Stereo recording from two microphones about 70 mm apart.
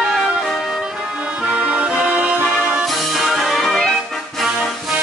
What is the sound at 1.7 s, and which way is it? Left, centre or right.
Music, centre.